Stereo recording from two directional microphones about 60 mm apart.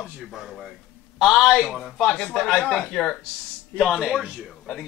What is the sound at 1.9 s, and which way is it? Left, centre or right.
A man's voice, centre.